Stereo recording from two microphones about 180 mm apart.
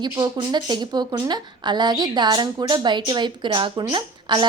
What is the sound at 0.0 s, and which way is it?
Speech, 25° right (ahead or behind).